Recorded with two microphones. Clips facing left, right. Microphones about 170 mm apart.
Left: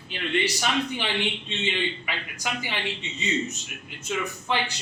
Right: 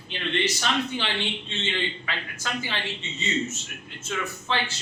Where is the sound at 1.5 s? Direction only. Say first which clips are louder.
Left 2 dB; 15° left (ahead or behind).